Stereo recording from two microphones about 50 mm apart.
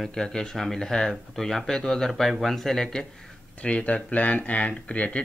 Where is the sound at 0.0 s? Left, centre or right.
Centre.